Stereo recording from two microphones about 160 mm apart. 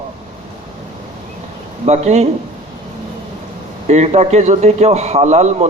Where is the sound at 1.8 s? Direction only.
45° right (ahead or behind).